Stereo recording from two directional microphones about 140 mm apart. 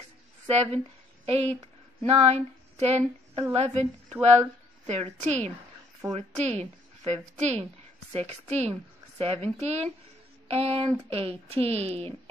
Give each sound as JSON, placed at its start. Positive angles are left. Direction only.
{"t": 0.5, "sound": "speech", "side_deg": -50}
{"t": 2.0, "sound": "a sound", "side_deg": -45}
{"t": 3.5, "sound": "speech", "side_deg": -50}